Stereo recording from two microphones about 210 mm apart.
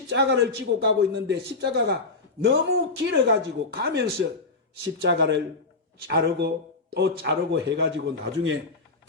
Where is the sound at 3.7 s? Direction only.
55° right (ahead or behind).